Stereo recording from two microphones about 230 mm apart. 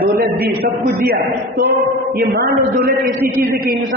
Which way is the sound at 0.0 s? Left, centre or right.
Right.